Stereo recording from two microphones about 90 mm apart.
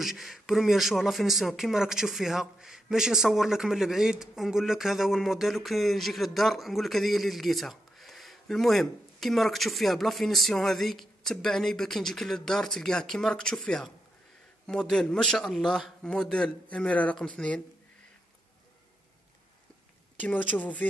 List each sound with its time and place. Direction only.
0.0 s a man's voice: 5° right (ahead or behind); by 17.6 s 15° left (ahead or behind)
20.2 s a man's voice: 20° left (ahead or behind)